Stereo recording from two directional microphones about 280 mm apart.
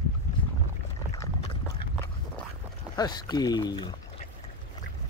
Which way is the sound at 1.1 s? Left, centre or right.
Centre.